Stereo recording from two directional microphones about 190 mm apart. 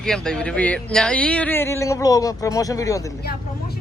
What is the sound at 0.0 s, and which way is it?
Speech, 5° left (ahead or behind).